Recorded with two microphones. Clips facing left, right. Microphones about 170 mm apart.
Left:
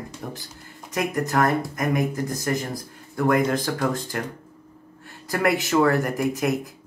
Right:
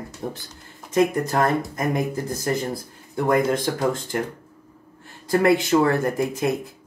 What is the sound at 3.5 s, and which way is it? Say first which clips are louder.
Speech: right 2 dB; 25° right (ahead or behind).